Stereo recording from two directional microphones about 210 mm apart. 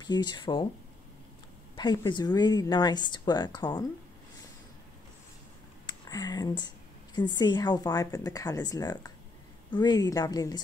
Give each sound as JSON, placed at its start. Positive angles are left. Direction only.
{"t": 0.0, "sound": "speech", "side_deg": 20}
{"t": 1.8, "sound": "speech", "side_deg": 20}
{"t": 5.9, "sound": "speech", "side_deg": 20}